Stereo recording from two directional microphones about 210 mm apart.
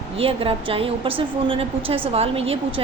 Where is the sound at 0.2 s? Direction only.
25° right (ahead or behind).